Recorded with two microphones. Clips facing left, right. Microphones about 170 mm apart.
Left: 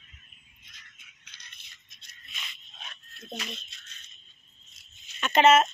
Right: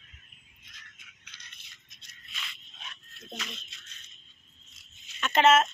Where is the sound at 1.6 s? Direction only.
25° left (ahead or behind).